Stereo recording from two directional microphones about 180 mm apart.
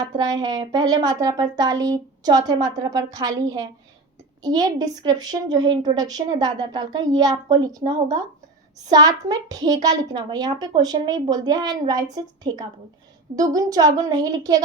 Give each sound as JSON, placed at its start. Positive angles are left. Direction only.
{"t": 0.2, "sound": "a woman's voice", "side_deg": -20}
{"t": 4.4, "sound": "a woman's voice", "side_deg": -20}